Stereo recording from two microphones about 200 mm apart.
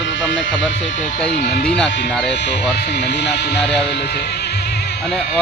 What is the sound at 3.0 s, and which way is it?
Speech, 60° left (ahead or behind).